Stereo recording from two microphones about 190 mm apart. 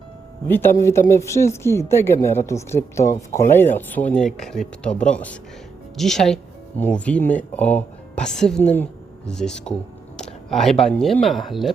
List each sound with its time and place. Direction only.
0.4 s a woman's voice: 10° left (ahead or behind)